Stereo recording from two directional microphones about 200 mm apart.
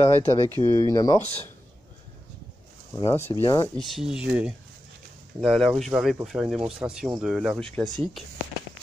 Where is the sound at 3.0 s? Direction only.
30° left (ahead or behind).